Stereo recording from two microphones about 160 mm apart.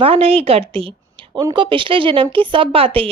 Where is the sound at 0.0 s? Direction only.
35° right (ahead or behind).